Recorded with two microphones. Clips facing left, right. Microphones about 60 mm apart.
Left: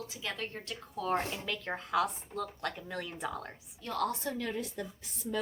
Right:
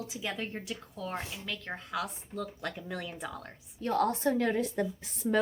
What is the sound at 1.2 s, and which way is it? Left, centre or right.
Speech, left.